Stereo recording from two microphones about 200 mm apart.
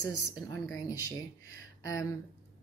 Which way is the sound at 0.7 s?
15° left (ahead or behind).